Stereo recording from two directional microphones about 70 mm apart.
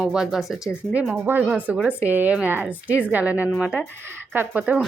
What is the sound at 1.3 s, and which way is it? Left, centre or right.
A woman's voice, right.